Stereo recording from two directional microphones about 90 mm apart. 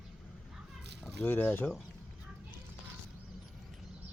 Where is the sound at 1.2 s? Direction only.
20° left (ahead or behind).